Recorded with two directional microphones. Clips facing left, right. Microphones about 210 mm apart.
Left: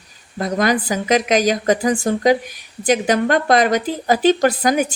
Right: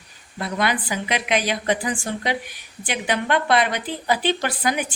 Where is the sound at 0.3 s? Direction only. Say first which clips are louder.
Left 6 dB; 40° left (ahead or behind).